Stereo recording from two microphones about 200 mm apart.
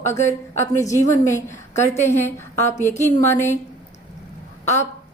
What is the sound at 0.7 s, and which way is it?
Speech, 15° left (ahead or behind).